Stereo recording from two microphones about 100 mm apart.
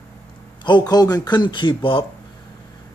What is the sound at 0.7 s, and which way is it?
Speech, 45° left (ahead or behind).